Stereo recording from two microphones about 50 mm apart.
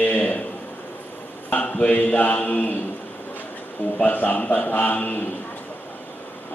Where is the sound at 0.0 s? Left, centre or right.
Left.